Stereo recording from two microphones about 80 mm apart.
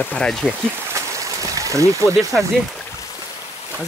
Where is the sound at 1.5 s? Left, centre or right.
Right.